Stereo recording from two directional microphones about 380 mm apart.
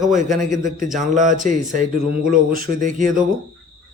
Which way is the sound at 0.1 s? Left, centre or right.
Centre.